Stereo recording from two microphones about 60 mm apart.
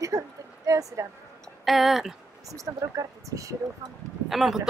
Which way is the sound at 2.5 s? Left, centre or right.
Right.